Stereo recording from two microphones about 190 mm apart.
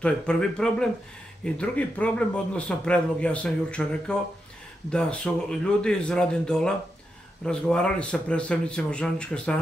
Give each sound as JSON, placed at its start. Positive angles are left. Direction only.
{"t": 0.0, "sound": "a man's voice", "side_deg": 5}